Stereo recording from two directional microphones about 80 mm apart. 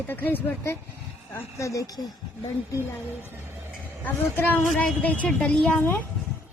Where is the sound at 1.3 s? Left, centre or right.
Left.